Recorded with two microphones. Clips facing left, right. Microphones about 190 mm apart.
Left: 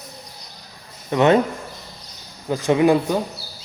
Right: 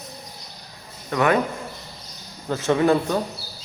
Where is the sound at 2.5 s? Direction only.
15° left (ahead or behind).